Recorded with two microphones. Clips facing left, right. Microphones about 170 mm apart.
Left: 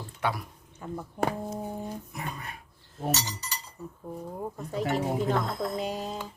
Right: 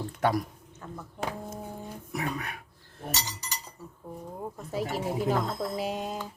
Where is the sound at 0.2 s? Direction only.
45° right (ahead or behind).